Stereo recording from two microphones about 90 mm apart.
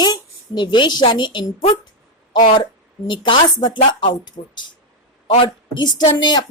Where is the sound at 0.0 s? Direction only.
55° left (ahead or behind).